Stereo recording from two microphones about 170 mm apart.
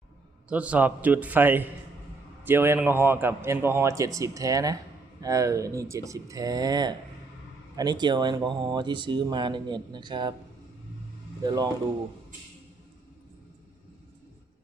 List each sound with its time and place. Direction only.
0.4 s a man's voice: 5° right (ahead or behind); by 10.3 s 25° right (ahead or behind)
11.4 s speech: 25° right (ahead or behind)